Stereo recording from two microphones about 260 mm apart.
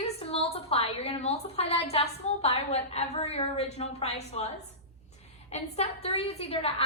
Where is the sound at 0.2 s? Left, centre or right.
Left.